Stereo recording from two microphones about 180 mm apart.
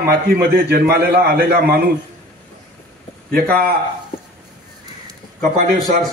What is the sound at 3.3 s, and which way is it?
Speech, 55° right (ahead or behind).